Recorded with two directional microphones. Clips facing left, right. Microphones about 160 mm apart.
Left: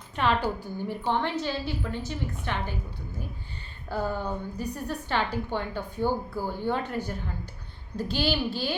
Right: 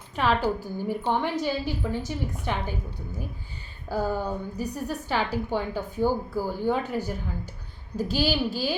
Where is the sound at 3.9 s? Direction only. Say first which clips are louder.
Right 3 dB; 10° right (ahead or behind).